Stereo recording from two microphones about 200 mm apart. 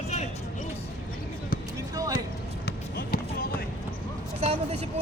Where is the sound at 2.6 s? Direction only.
50° left (ahead or behind).